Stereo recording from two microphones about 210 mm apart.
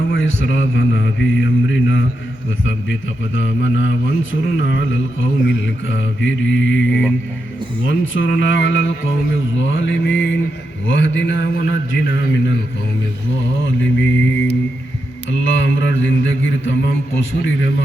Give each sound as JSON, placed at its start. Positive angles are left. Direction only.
{"t": 0.1, "sound": "speech", "side_deg": 65}
{"t": 3.3, "sound": "speech", "side_deg": 60}
{"t": 13.7, "sound": "speech", "side_deg": 60}
{"t": 15.3, "sound": "mantra", "side_deg": 65}